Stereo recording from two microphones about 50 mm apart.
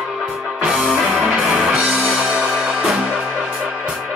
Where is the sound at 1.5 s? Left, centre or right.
Right.